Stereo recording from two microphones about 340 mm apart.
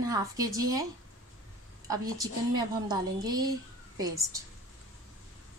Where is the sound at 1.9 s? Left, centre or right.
Centre.